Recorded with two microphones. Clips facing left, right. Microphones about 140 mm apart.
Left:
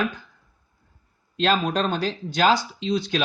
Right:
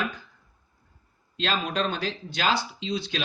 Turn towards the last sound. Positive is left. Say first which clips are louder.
# left 6 dB
turn(degrees=45)  # may be behind; listen again after turning